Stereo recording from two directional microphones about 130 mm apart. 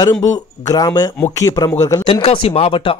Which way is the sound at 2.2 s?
45° left (ahead or behind).